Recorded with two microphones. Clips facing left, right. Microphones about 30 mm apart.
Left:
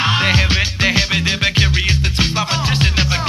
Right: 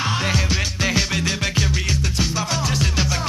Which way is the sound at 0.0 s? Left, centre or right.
Left.